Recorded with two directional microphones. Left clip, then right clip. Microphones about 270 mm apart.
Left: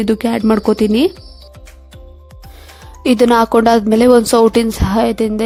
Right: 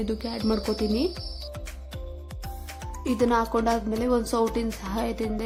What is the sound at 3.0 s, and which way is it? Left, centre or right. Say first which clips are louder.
A woman's voice: left 13 dB; left.